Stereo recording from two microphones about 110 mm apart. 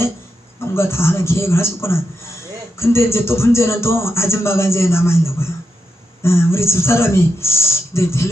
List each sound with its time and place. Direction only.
0.6 s speech: 25° left (ahead or behind)